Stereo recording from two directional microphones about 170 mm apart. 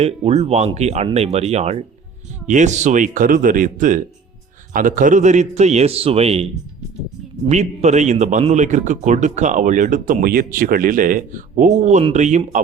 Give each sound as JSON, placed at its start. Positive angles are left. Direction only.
{"t": 0.0, "sound": "a man's voice", "side_deg": -35}
{"t": 7.4, "sound": "a man's voice", "side_deg": -40}